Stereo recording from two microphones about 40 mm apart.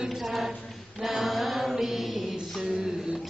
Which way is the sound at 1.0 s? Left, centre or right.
Centre.